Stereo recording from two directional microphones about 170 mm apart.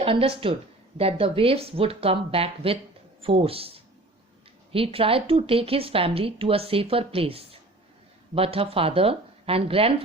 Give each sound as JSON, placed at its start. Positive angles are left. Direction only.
{"t": 0.0, "sound": "a woman's voice", "side_deg": -35}